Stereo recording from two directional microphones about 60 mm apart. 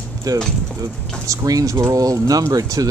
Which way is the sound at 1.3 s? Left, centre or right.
Right.